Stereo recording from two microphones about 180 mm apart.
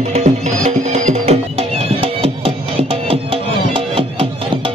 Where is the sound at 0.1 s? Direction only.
35° right (ahead or behind).